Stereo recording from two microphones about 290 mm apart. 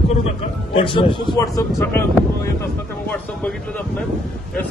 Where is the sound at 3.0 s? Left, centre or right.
Centre.